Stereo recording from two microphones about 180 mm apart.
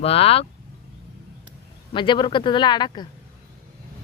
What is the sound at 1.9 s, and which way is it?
Speech, 25° left (ahead or behind).